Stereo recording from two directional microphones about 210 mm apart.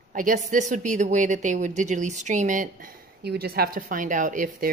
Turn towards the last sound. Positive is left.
turn(degrees=-40)  # may be behind; listen again after turning